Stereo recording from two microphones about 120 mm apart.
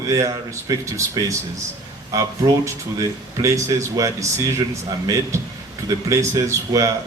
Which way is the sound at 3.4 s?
25° right (ahead or behind).